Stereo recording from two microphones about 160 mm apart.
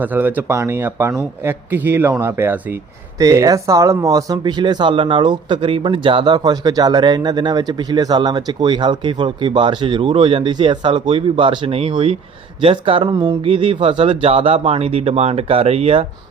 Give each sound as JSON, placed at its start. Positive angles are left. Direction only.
{"t": 0.0, "sound": "speech", "side_deg": -10}